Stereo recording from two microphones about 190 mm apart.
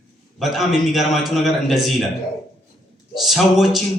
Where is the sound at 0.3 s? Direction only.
Centre (ahead or behind).